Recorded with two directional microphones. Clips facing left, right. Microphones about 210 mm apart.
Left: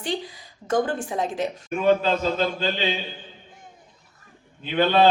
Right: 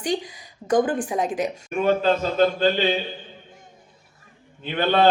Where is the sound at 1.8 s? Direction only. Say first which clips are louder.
Even; 50° right (ahead or behind).